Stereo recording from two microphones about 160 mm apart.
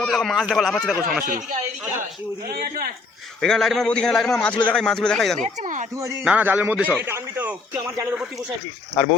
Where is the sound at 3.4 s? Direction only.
5° left (ahead or behind).